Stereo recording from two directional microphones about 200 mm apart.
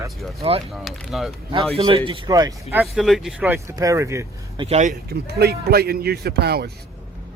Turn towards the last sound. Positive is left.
turn(degrees=-55)  # may be behind; listen again after turning